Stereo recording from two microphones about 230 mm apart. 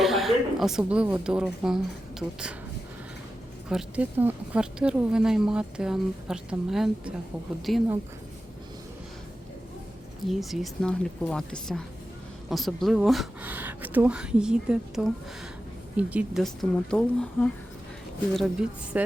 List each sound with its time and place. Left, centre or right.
0.0 s speech: centre
3.7 s speech: centre
10.2 s speech: centre
18.9 s a woman's voice: centre